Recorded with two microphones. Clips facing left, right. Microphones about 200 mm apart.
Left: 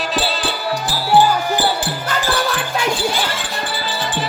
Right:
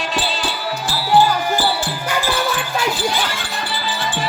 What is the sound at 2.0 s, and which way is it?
Music, 10° right (ahead or behind).